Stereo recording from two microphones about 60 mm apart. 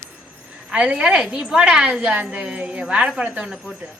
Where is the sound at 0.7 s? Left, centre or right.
Centre.